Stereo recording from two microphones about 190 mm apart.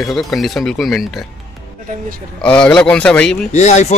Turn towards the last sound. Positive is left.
turn(degrees=35)  # may be behind; listen again after turning